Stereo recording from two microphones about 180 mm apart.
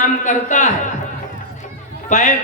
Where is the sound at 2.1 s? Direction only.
45° left (ahead or behind).